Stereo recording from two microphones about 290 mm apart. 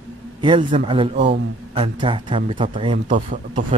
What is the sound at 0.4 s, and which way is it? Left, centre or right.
A man's voice, centre.